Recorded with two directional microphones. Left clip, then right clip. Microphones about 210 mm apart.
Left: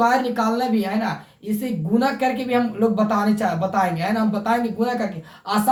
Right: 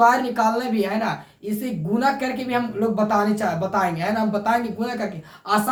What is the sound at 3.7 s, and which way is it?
Speech, 5° right (ahead or behind).